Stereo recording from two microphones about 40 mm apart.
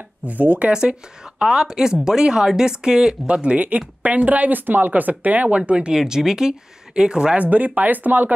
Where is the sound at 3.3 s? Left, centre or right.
Right.